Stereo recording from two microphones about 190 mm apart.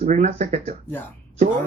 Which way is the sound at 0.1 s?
40° right (ahead or behind).